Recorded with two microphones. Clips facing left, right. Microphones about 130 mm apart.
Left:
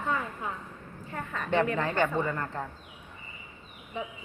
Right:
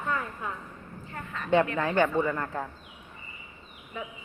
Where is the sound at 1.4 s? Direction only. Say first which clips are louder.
Right 3 dB; 15° right (ahead or behind).